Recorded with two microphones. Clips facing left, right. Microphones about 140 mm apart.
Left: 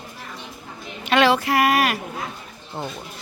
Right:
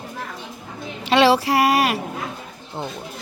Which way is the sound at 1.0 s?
30° right (ahead or behind).